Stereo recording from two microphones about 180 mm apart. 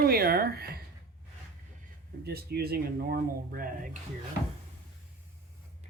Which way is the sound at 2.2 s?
60° right (ahead or behind).